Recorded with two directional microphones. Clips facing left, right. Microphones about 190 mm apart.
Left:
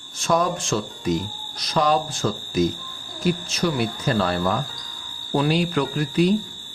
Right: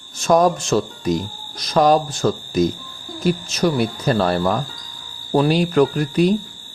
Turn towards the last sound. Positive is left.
turn(degrees=-45)  # may be behind; listen again after turning